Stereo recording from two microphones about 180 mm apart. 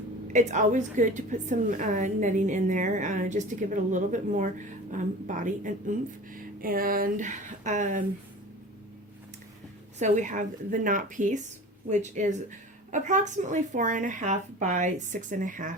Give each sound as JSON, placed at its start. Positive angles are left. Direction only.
{"t": 0.3, "sound": "a woman's voice", "side_deg": -40}
{"t": 10.0, "sound": "a woman's voice", "side_deg": -45}